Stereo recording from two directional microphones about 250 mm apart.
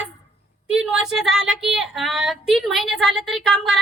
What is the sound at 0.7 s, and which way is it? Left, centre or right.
Child singing, centre.